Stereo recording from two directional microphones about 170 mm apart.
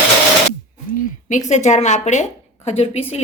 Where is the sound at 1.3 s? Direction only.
45° left (ahead or behind).